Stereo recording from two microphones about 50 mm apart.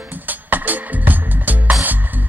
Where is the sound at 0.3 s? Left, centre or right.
Right.